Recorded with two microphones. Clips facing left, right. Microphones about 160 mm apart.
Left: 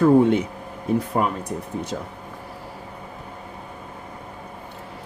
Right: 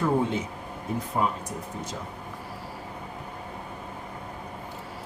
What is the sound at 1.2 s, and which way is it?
Speech, 70° left (ahead or behind).